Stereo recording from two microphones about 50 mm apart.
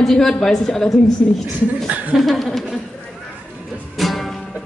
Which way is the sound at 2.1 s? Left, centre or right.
Centre.